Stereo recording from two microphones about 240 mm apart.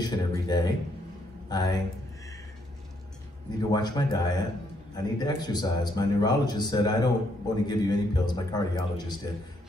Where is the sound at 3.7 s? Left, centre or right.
Centre.